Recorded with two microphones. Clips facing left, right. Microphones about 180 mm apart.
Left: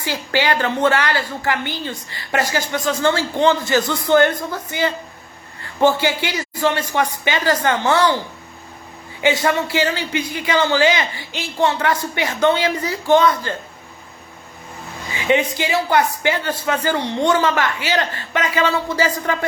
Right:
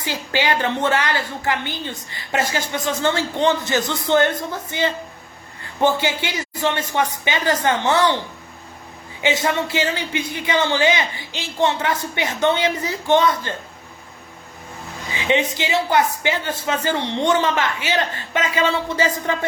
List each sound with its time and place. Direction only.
0.0 s a woman's voice: 20° right (ahead or behind)
9.2 s a woman's voice: 20° right (ahead or behind)
15.1 s a woman's voice: 20° right (ahead or behind)